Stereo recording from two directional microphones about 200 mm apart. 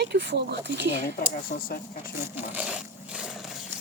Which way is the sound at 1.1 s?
45° left (ahead or behind).